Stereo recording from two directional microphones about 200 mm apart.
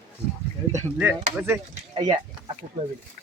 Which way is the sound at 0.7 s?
10° right (ahead or behind).